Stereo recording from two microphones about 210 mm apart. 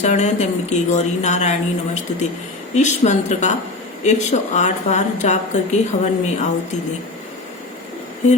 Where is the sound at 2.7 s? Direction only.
35° left (ahead or behind).